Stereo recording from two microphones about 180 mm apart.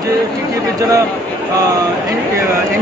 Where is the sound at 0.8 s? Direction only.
20° right (ahead or behind).